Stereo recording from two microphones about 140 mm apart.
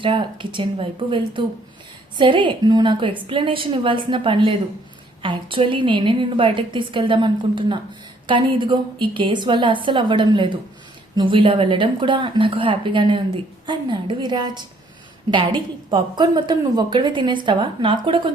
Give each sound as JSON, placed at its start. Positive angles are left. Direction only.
{"t": 0.0, "sound": "speech", "side_deg": -35}